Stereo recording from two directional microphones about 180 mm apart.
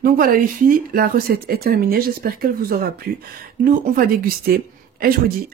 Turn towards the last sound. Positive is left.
turn(degrees=-55)  # may be behind; listen again after turning